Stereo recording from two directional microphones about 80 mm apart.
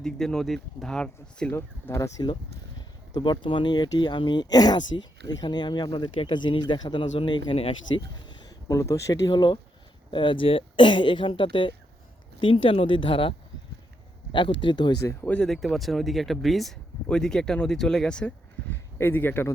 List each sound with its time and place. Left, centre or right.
0.0 s speech: centre
1.5 s speech: left
3.2 s speech: left
8.4 s speech: left
9.3 s speech: left
10.1 s speech: left
14.3 s speech: left
15.2 s speech: centre
15.4 s speech: centre
18.7 s speech: left